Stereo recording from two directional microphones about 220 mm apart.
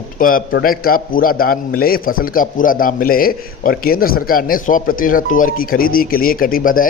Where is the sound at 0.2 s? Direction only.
40° left (ahead or behind).